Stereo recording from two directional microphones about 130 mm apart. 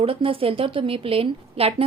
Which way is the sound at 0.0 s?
45° right (ahead or behind).